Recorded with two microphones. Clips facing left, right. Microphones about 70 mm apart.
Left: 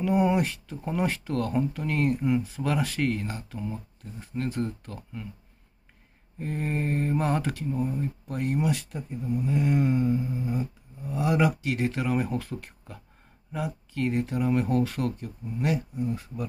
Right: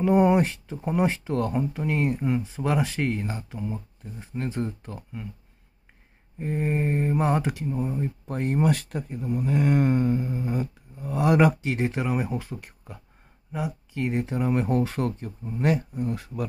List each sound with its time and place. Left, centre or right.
0.0 s speech: right
6.4 s speech: centre
7.6 s speech: centre
8.0 s speech: right
8.6 s speech: right
11.6 s speech: right; by 13.7 s centre
13.9 s speech: right
16.1 s speech: right